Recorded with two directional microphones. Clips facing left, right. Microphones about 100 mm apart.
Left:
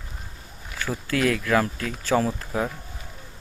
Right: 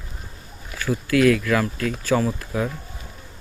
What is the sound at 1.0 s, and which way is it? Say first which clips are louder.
Speech: right 6 dB; 30° left (ahead or behind).